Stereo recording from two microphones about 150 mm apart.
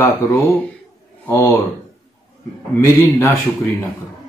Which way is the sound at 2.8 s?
15° left (ahead or behind).